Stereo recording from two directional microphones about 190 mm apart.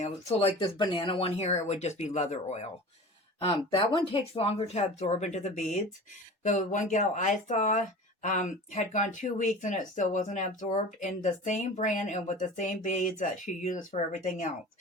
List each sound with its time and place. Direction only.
0.0 s speech: 35° left (ahead or behind)